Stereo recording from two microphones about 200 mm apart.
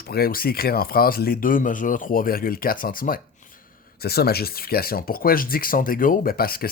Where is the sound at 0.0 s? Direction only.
50° left (ahead or behind).